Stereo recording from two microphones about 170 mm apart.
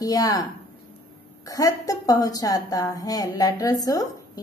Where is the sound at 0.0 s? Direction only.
20° left (ahead or behind).